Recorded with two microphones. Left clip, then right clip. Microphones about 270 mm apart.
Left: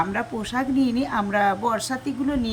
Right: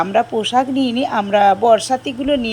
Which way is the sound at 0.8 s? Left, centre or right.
Centre.